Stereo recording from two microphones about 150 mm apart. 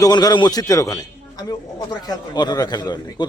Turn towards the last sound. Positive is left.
turn(degrees=30)  # may be behind; listen again after turning